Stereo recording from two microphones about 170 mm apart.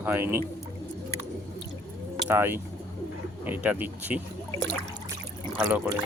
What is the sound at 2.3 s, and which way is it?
Speech, 15° right (ahead or behind).